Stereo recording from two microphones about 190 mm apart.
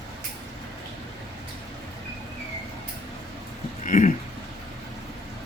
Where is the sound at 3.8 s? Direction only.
40° left (ahead or behind).